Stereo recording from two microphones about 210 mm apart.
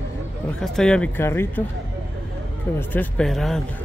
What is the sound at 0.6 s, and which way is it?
Speech, centre (ahead or behind).